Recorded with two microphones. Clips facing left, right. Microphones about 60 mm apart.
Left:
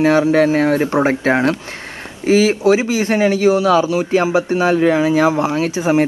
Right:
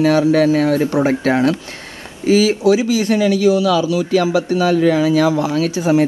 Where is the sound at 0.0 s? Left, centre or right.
Left.